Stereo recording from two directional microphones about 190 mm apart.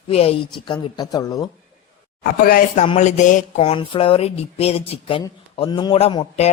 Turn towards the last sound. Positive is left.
turn(degrees=30)  # may be behind; listen again after turning